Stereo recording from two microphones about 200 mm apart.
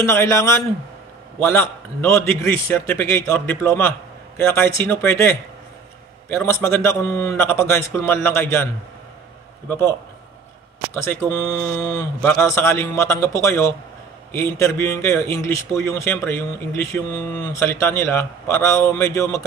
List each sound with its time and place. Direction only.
0.0 s speech: 10° left (ahead or behind)
11.1 s speech: 15° left (ahead or behind)